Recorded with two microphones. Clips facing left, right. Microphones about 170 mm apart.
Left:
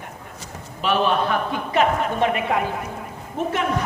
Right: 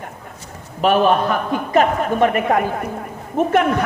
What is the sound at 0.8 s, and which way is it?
A man's voice, 45° right (ahead or behind).